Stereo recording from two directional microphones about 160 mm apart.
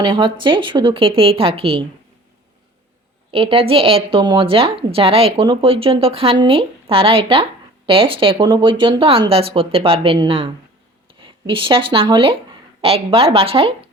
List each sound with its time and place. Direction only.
0.0 s a woman's voice: 30° right (ahead or behind)
3.3 s a woman's voice: 35° right (ahead or behind)